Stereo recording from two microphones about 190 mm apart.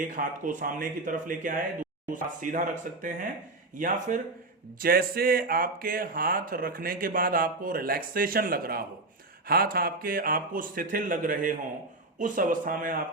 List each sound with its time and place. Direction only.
0.0 s speech: 45° right (ahead or behind)